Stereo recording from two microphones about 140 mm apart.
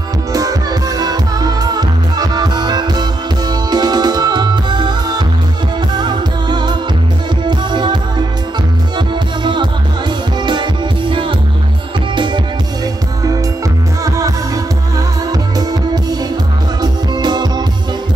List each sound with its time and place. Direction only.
0.3 s music: 25° right (ahead or behind)
14.0 s music: 25° right (ahead or behind)
15.7 s music: 30° right (ahead or behind)